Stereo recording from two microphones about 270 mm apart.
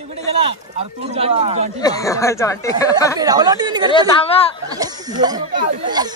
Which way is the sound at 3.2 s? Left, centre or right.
Centre.